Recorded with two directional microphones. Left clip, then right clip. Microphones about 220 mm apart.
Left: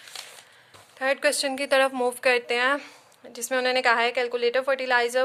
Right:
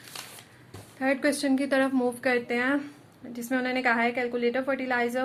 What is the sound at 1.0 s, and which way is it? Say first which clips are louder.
A woman's voice: left 3 dB; 45° left (ahead or behind).